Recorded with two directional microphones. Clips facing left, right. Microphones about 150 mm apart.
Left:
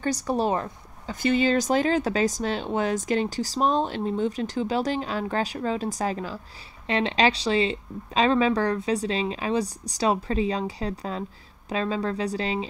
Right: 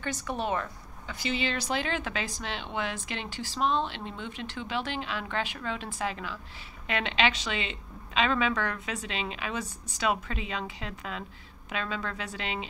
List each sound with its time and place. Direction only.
0.0 s a woman's voice: 40° left (ahead or behind)
1.2 s speech: 45° left (ahead or behind)